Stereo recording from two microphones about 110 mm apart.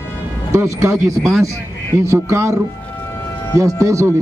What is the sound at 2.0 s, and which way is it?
Speech, 25° right (ahead or behind).